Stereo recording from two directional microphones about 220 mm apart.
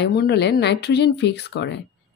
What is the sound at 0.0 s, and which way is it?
A woman's voice, 50° left (ahead or behind).